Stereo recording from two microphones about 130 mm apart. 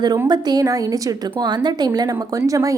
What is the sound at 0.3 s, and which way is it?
A woman's voice, 30° right (ahead or behind).